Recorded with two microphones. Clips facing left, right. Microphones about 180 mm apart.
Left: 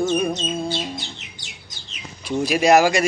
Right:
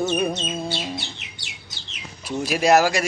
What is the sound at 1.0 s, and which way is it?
Bird, 65° right (ahead or behind).